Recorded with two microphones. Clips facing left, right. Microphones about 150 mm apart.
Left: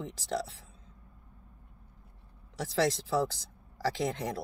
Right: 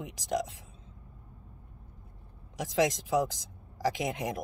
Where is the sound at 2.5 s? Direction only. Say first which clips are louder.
Right 1 dB; 15° right (ahead or behind).